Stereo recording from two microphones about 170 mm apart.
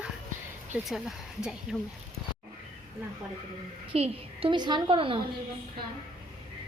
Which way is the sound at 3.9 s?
35° right (ahead or behind).